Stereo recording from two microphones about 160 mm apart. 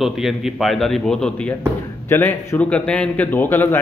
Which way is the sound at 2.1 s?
15° left (ahead or behind).